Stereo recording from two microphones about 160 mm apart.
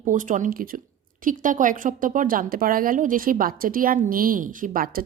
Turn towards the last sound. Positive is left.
turn(degrees=-65)  # may be behind; listen again after turning